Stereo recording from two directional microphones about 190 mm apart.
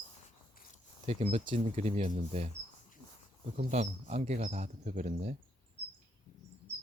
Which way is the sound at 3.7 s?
35° right (ahead or behind).